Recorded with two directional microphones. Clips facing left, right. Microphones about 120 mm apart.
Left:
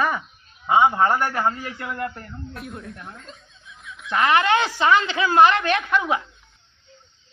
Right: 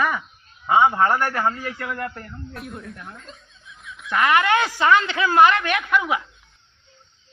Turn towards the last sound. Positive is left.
turn(degrees=30)  # may be behind; listen again after turning